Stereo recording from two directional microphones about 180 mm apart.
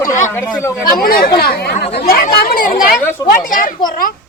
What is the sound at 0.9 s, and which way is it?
Speech, 55° left (ahead or behind).